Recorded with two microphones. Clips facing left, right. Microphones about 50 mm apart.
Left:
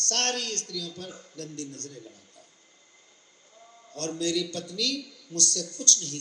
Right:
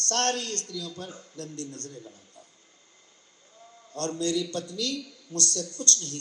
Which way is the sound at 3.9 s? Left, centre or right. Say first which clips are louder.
Right 1 dB; right.